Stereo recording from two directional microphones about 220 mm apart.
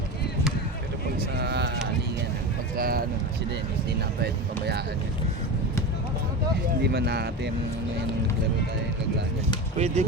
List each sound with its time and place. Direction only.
1.4 s run: 50° right (ahead or behind)
2.7 s a sound: 40° right (ahead or behind)
4.2 s speech: 50° right (ahead or behind)
6.8 s speech: 50° right (ahead or behind)
9.7 s speech: 30° right (ahead or behind)